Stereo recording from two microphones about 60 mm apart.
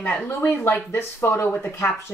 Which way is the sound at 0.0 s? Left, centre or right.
Left.